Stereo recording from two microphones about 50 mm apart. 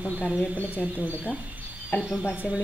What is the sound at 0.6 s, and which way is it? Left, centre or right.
Speech, left.